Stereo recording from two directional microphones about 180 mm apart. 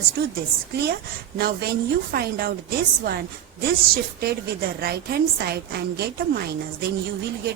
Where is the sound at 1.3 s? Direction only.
60° right (ahead or behind).